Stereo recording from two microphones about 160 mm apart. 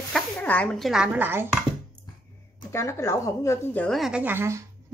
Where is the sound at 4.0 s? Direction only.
5° right (ahead or behind).